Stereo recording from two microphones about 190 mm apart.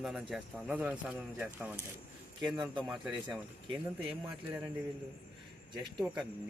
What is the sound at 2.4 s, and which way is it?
Speech, centre (ahead or behind).